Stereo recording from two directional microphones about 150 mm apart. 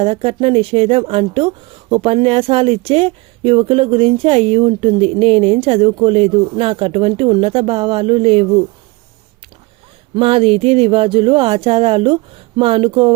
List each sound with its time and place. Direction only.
0.0 s speech: 40° right (ahead or behind)
10.2 s speech: 40° right (ahead or behind)